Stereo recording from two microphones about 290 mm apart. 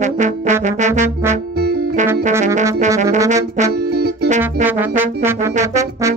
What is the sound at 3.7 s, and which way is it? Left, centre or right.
Music, right.